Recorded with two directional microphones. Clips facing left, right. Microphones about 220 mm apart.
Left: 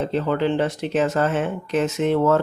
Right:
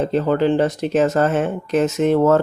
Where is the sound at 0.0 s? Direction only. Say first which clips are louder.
Right 4 dB; 45° right (ahead or behind).